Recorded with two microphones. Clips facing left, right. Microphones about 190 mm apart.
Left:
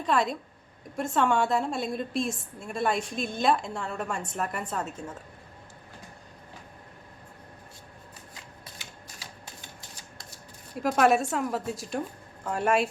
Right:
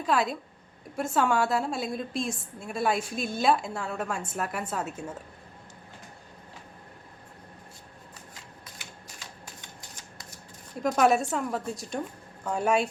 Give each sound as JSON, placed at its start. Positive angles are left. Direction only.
{"t": 0.0, "sound": "a woman's voice", "side_deg": 0}
{"t": 9.1, "sound": "typewriter", "side_deg": 35}
{"t": 10.8, "sound": "a woman's voice", "side_deg": 0}